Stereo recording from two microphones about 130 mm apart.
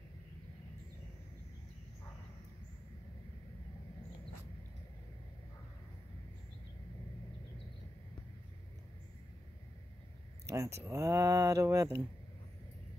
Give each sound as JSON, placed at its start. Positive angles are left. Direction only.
{"t": 10.5, "sound": "speech", "side_deg": -25}